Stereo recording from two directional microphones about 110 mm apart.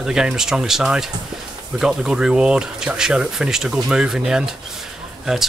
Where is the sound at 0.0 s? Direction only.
5° right (ahead or behind).